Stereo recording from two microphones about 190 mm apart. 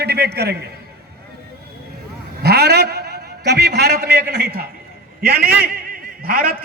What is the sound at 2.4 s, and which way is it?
A man's voice, 55° right (ahead or behind).